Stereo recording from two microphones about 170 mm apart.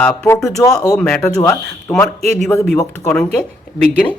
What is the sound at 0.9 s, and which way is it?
Speech, 5° left (ahead or behind).